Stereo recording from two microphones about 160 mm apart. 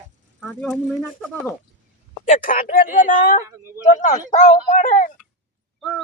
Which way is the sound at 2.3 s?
60° left (ahead or behind).